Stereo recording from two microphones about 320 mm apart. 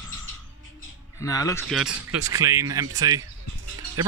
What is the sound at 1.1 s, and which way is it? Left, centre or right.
Speech, centre.